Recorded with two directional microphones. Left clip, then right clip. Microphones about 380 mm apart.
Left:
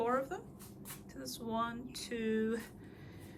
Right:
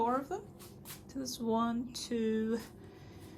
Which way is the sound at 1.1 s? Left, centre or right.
Centre.